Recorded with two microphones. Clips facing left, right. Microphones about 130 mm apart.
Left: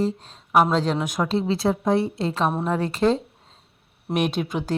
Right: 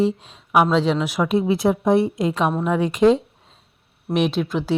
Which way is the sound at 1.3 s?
20° right (ahead or behind).